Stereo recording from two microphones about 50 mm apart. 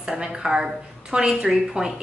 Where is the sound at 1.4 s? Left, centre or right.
Centre.